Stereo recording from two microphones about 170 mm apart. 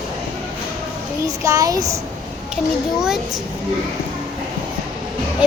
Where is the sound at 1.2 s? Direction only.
20° right (ahead or behind).